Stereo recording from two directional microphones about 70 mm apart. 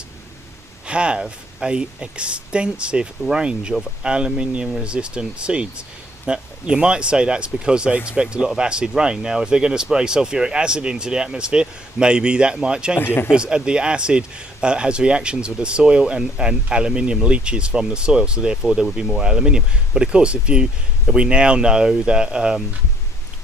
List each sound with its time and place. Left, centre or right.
0.9 s speech: centre